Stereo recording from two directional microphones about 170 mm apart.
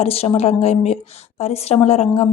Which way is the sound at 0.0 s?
35° left (ahead or behind).